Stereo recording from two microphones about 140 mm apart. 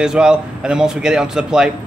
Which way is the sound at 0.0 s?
5° right (ahead or behind).